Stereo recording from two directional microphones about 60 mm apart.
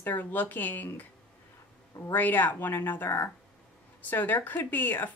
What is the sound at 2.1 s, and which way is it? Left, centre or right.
Speech, left.